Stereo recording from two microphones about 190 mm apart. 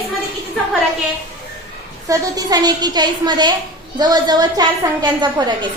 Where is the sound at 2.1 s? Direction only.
20° right (ahead or behind).